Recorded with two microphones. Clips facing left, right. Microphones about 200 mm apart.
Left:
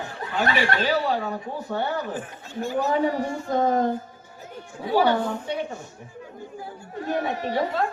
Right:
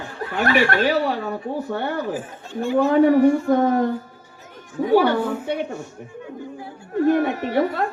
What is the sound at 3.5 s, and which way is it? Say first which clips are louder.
Speech: right 4 dB; 60° right (ahead or behind).